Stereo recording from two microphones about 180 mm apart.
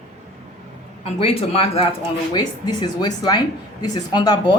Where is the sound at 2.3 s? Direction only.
20° left (ahead or behind).